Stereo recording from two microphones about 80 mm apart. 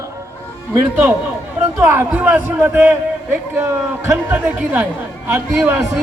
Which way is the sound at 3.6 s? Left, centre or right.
Right.